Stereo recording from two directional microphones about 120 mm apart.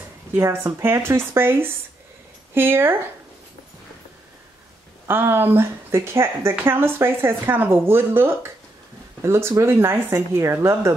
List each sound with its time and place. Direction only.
0.3 s speech: 20° right (ahead or behind)
5.0 s speech: 20° right (ahead or behind)